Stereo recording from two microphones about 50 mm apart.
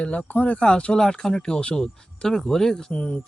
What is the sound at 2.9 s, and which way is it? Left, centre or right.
Speech, left.